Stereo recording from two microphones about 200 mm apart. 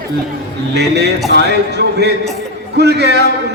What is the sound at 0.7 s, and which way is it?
Speech, 55° right (ahead or behind).